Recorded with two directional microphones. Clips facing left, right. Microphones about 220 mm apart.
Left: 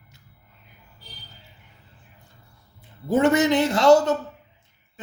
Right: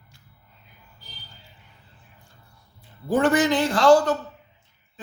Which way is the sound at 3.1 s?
25° left (ahead or behind).